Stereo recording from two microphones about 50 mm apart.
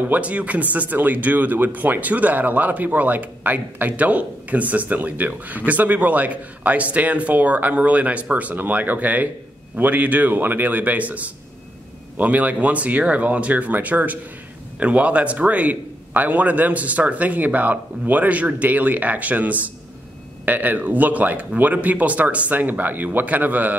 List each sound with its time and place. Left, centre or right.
0.1 s speech: right